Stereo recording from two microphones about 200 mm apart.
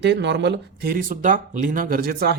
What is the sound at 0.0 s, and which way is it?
Speech, 60° right (ahead or behind).